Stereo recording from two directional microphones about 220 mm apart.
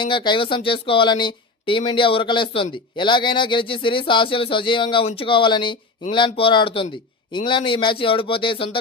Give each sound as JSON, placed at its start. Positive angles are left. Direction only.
{"t": 0.0, "sound": "speech", "side_deg": 20}